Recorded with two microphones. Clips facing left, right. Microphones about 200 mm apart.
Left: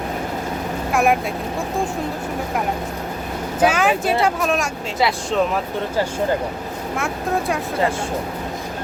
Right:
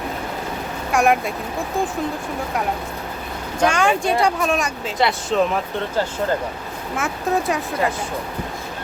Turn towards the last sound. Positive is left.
turn(degrees=0)  # may be behind; listen again after turning